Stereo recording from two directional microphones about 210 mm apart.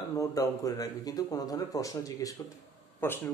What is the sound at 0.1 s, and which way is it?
Speech, 15° left (ahead or behind).